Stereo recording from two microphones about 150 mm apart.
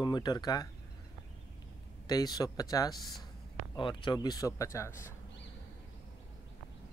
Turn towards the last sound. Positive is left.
turn(degrees=20)  # may be behind; listen again after turning